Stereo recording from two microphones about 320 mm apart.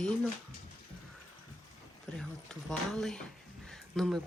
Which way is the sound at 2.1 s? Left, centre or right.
Centre.